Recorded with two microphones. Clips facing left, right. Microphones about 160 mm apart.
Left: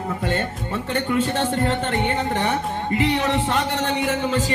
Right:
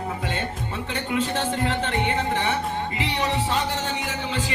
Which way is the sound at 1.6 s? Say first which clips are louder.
Left 3 dB; 45° left (ahead or behind).